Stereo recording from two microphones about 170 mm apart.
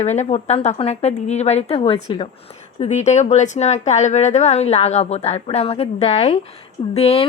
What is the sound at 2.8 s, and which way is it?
A woman's voice, 40° left (ahead or behind).